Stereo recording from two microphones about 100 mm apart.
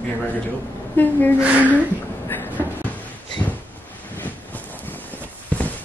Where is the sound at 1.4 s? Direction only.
10° right (ahead or behind).